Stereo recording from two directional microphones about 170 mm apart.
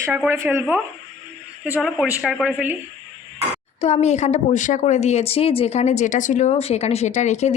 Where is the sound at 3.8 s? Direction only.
40° left (ahead or behind).